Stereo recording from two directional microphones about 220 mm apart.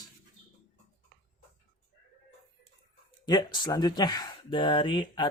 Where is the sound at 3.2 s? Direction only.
20° left (ahead or behind).